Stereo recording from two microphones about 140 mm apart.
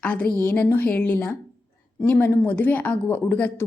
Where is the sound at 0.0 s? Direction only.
10° left (ahead or behind).